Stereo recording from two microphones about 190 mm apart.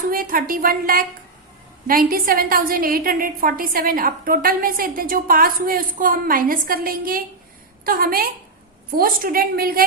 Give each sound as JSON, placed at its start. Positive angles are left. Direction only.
{"t": 0.1, "sound": "a woman's voice", "side_deg": -50}